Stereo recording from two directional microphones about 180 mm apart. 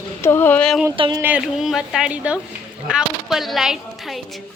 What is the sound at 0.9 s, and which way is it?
Speech, 25° right (ahead or behind).